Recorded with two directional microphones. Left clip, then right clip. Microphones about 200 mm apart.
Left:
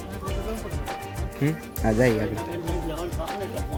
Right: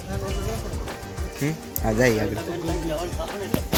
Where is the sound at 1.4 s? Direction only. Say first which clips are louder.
Left 1 dB; 15° left (ahead or behind).